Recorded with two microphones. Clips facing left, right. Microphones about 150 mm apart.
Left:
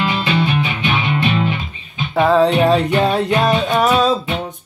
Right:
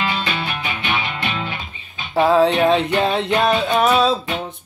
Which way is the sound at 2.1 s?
Centre (ahead or behind).